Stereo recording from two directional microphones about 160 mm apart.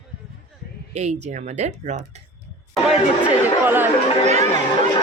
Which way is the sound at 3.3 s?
10° right (ahead or behind).